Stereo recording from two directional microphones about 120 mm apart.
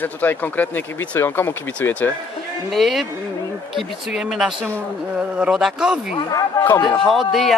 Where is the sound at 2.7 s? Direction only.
Centre (ahead or behind).